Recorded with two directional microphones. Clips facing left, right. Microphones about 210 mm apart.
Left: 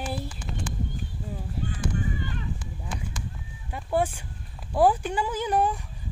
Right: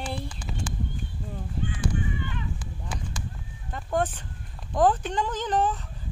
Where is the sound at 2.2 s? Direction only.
40° left (ahead or behind).